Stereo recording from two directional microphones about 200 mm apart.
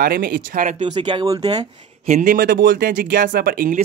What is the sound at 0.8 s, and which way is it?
Speech, 25° right (ahead or behind).